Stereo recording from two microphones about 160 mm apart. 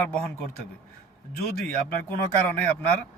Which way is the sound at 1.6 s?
10° left (ahead or behind).